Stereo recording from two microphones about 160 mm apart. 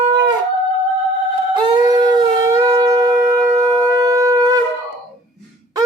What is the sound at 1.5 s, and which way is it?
Shofar, 30° right (ahead or behind).